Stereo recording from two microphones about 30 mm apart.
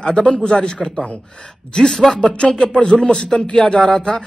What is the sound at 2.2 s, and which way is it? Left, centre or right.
Speech, left.